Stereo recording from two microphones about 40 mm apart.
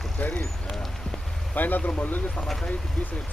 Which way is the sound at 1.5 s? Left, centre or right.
Left.